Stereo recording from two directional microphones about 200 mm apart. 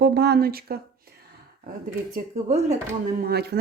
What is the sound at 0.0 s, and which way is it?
Speech, 55° right (ahead or behind).